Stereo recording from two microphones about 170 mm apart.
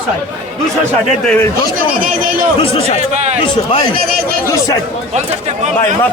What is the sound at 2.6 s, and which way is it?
Speech, 35° left (ahead or behind).